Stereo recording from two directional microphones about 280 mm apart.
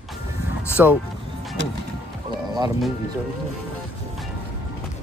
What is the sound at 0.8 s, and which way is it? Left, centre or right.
Speech, centre.